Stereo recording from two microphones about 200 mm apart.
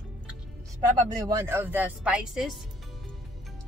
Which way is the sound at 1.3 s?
10° right (ahead or behind).